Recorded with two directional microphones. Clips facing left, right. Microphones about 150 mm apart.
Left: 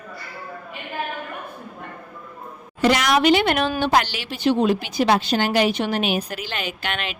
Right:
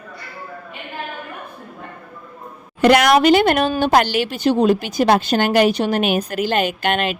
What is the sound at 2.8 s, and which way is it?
A woman's voice, 55° right (ahead or behind).